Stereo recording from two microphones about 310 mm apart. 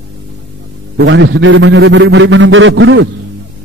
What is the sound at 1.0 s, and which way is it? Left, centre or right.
A man's voice, right.